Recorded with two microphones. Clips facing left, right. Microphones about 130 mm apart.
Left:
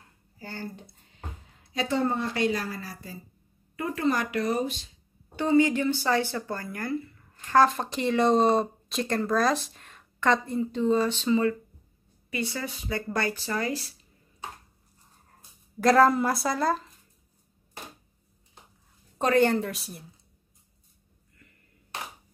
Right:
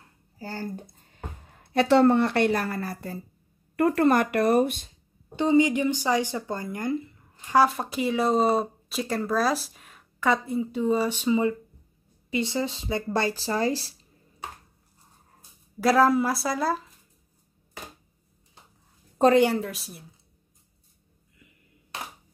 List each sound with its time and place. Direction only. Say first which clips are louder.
0.4 s speech: right 4 dB; 40° right (ahead or behind); by 4.9 s 55° right (ahead or behind)
5.3 s speech: right 1 dB; 20° right (ahead or behind)
15.8 s speech: even; 5° right (ahead or behind)
19.3 s speech: right 1 dB; 10° right (ahead or behind)
19.6 s speech: left 1 dB; centre (ahead or behind)